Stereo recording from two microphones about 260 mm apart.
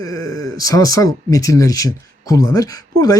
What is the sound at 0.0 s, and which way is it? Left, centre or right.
Speech, centre.